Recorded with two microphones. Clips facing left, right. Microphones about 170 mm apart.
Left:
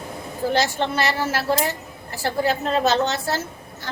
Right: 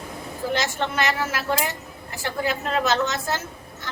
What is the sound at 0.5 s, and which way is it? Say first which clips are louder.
Speech: left 3 dB; 35° left (ahead or behind).